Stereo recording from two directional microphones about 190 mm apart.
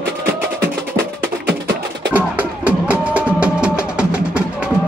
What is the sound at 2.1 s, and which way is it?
Music, 10° right (ahead or behind).